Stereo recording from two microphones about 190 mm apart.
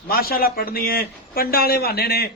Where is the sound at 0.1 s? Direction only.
50° left (ahead or behind).